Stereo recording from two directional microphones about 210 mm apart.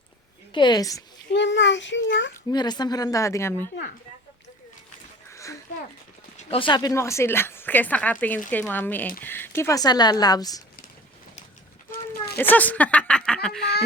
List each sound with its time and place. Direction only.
0.5 s a woman's voice: 20° left (ahead or behind)
1.3 s a child's voice: 55° left (ahead or behind)
2.5 s speech: 20° left (ahead or behind)
5.3 s a sound: 15° left (ahead or behind)
6.3 s a woman's voice: 25° left (ahead or behind)
11.9 s a sound: 50° left (ahead or behind)
12.4 s speech: 10° left (ahead or behind)